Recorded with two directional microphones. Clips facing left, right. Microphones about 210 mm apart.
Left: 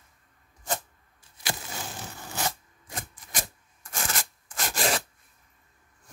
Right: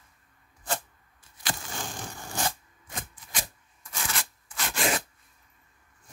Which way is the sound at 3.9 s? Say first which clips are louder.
Left 2 dB; 45° left (ahead or behind).